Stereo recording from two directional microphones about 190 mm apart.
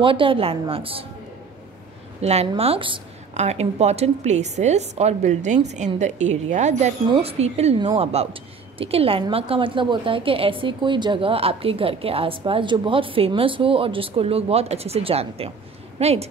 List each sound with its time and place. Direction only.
0.0 s a woman's voice: 25° right (ahead or behind)
2.2 s a woman's voice: 30° right (ahead or behind)